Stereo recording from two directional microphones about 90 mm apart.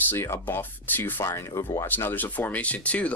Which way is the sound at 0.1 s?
25° left (ahead or behind).